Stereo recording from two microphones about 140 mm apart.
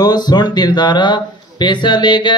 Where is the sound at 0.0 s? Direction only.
30° left (ahead or behind).